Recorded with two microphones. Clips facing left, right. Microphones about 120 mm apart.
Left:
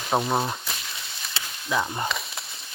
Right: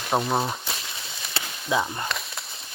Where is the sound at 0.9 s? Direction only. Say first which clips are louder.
Right 1 dB; 25° right (ahead or behind).